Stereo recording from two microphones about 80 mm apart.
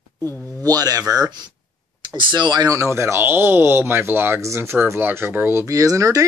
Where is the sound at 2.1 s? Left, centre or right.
Right.